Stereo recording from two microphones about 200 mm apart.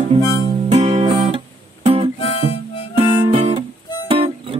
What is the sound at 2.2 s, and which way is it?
Harmonica, 30° left (ahead or behind).